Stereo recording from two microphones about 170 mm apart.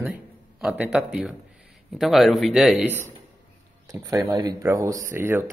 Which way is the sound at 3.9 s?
20° right (ahead or behind).